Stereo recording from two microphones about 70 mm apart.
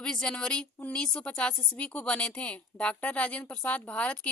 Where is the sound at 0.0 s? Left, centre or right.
Centre.